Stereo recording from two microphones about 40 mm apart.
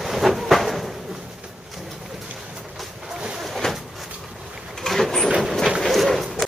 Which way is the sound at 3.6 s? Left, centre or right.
Centre.